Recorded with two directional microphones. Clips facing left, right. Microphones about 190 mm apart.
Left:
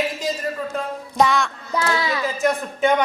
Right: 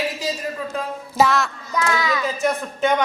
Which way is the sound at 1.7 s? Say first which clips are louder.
Even; 30° left (ahead or behind).